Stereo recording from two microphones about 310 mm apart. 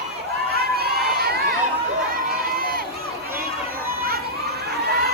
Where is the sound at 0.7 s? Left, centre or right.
Right.